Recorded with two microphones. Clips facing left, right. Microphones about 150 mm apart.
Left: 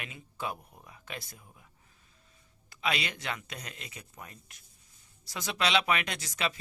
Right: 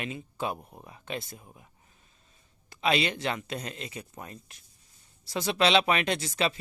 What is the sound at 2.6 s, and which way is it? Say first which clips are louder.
Speech: right 7 dB; 30° right (ahead or behind).